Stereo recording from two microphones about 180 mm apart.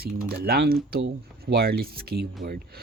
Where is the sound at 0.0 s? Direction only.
60° right (ahead or behind).